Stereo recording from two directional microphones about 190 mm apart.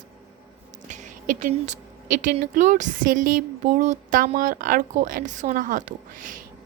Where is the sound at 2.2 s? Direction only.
45° right (ahead or behind).